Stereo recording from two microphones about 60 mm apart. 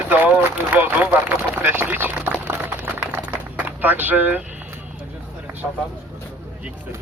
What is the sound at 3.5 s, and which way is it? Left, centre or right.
Speech, right.